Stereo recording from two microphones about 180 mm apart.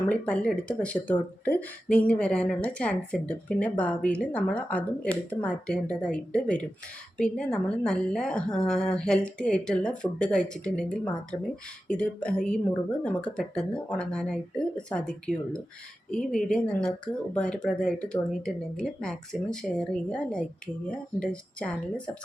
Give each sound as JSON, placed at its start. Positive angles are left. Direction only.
{"t": 0.1, "sound": "a woman's voice", "side_deg": 5}
{"t": 12.5, "sound": "a woman's voice", "side_deg": 5}